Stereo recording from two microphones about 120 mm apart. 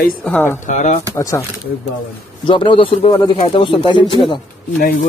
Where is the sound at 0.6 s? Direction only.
80° left.